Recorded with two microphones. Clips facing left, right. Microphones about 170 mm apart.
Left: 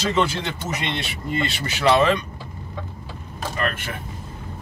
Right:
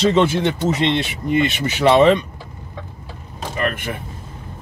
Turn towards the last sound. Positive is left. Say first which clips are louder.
# right 4 dB
turn(degrees=-15)  # may be behind; listen again after turning